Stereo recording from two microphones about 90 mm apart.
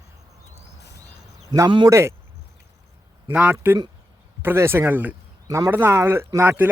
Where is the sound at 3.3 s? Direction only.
25° right (ahead or behind).